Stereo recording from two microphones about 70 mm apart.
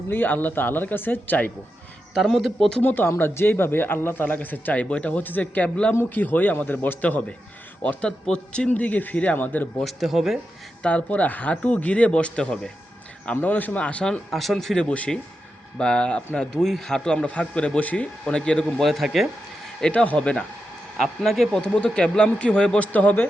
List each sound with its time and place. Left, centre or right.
0.1 s speech: left
2.1 s speech: centre
2.8 s speech: left
5.9 s speech: left
9.8 s speech: centre
10.8 s a man's voice: left; by 14.8 s centre
14.8 s a man's voice: centre
18.8 s speech: centre
19.9 s a man's voice: centre
21.0 s speech: centre
21.6 s a man's voice: centre
22.9 s speech: left